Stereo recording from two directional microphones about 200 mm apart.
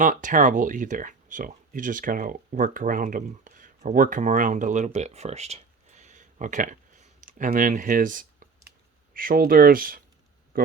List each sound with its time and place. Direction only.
0.0 s speech: 40° right (ahead or behind)